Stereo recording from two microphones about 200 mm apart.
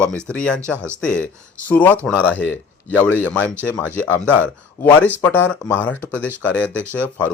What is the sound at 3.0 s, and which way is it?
Speech, 10° left (ahead or behind).